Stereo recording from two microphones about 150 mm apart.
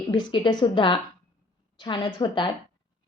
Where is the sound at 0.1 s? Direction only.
30° left (ahead or behind).